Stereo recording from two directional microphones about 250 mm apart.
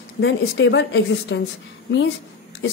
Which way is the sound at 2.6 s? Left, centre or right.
Left.